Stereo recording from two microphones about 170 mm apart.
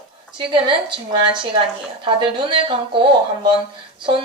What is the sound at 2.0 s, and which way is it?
A woman's voice, 30° right (ahead or behind).